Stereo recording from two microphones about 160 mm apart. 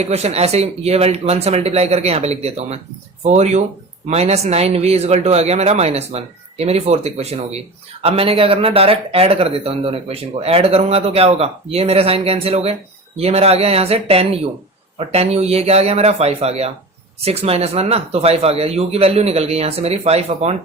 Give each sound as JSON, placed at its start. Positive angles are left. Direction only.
{"t": 0.0, "sound": "speech", "side_deg": -40}